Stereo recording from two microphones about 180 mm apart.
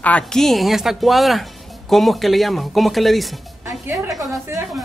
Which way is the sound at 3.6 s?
15° right (ahead or behind).